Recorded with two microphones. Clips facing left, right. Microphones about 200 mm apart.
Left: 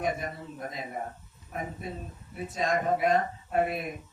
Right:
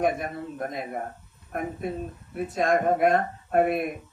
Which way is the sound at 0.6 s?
60° right (ahead or behind).